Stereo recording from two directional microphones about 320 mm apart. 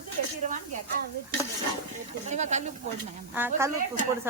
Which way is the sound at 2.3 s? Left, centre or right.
Right.